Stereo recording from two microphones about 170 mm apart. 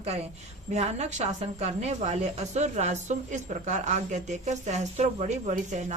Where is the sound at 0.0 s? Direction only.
35° right (ahead or behind).